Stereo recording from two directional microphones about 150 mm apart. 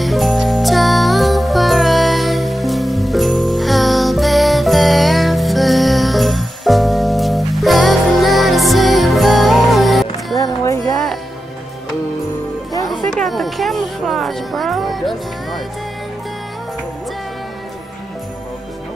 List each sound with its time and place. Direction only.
0.0 s music: centre (ahead or behind)
10.3 s music: 20° left (ahead or behind)
12.8 s music: centre (ahead or behind)